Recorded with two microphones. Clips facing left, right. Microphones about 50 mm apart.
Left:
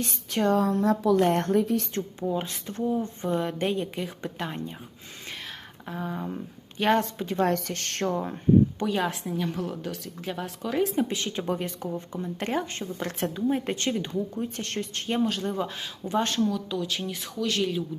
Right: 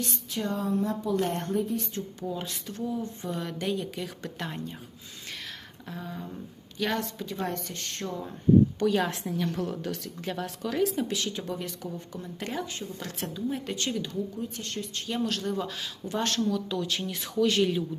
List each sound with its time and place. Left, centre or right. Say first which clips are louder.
0.3 s speech: left 9 dB; left
0.5 s a woman's voice: left 4 dB; left
1.2 s speech: left 6 dB; left
2.2 s speech: left 6 dB; left
5.9 s speech: left 6 dB; left
7.4 s speech: left 8 dB; left
8.8 s a woman's voice: right 1 dB; centre
10.8 s speech: left 2 dB; left
12.4 s speech: left 4 dB; left
15.2 s speech: left 2 dB; left
16.5 s speech: even; centre